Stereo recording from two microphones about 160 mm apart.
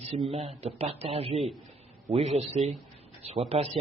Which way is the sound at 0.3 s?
40° right (ahead or behind).